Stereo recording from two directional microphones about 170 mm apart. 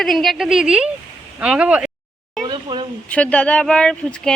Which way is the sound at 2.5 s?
25° right (ahead or behind).